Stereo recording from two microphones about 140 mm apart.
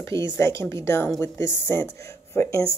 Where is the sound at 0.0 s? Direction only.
20° left (ahead or behind).